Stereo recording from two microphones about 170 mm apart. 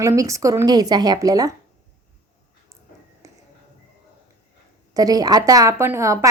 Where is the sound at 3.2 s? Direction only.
20° right (ahead or behind).